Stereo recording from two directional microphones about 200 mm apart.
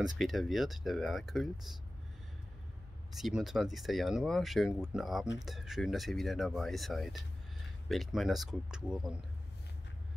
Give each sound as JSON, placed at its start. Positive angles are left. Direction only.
{"t": 0.0, "sound": "speech", "side_deg": 0}
{"t": 3.2, "sound": "speech", "side_deg": 0}